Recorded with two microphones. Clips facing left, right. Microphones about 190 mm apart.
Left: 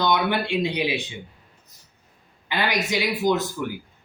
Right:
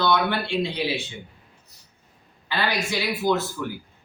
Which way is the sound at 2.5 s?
15° left (ahead or behind).